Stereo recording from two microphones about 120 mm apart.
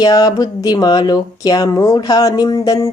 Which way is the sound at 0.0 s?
30° left (ahead or behind).